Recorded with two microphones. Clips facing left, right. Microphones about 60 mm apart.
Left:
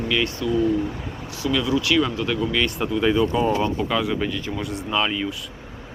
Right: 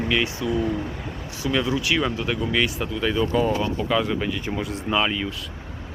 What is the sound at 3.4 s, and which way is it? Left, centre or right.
Speech, centre.